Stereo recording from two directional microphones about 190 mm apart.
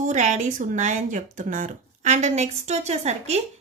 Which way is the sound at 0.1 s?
40° right (ahead or behind).